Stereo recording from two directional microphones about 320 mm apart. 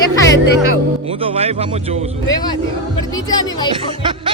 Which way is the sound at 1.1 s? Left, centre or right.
Centre.